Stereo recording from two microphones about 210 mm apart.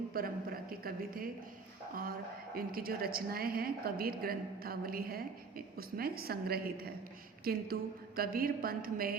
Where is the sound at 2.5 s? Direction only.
45° right (ahead or behind).